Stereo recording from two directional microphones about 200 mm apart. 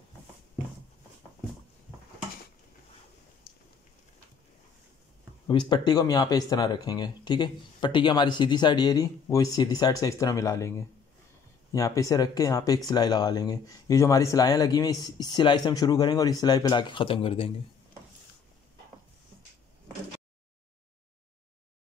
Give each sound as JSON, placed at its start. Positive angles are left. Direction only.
{"t": 5.5, "sound": "speech", "side_deg": 25}
{"t": 11.7, "sound": "speech", "side_deg": 15}